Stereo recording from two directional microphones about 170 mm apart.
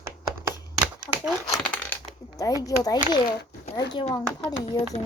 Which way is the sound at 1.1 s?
15° left (ahead or behind).